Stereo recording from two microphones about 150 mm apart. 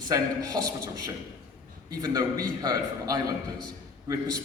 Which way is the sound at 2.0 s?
25° right (ahead or behind).